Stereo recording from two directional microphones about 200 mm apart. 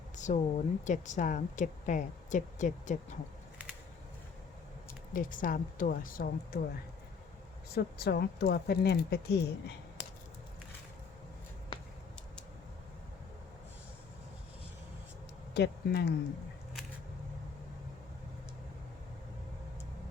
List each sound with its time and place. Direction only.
0.2 s speech: 35° left (ahead or behind)
5.1 s speech: 40° left (ahead or behind)
7.7 s speech: 50° left (ahead or behind)
15.5 s speech: 55° left (ahead or behind)